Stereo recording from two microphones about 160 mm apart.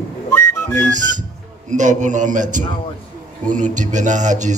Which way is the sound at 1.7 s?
50° right (ahead or behind).